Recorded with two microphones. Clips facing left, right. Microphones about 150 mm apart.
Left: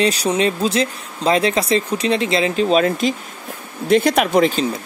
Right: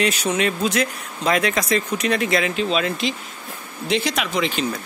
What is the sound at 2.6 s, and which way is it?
Speech, 40° left (ahead or behind).